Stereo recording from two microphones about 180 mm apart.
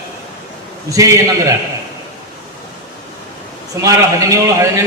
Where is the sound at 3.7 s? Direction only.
15° right (ahead or behind).